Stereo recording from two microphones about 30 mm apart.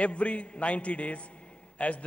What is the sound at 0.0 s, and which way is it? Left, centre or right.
A man's voice, left.